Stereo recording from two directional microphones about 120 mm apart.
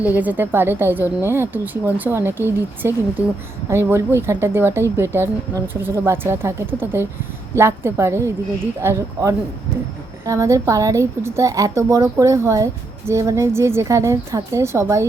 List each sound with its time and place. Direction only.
0.0 s a woman's voice: 15° right (ahead or behind)